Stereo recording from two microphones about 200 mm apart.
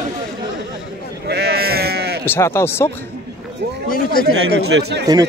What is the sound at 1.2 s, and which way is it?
Sheep, 55° right (ahead or behind).